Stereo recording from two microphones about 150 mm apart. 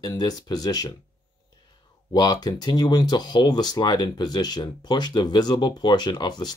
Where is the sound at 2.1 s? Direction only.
25° left (ahead or behind).